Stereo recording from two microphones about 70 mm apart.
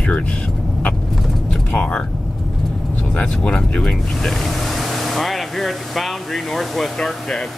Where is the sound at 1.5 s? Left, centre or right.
Centre.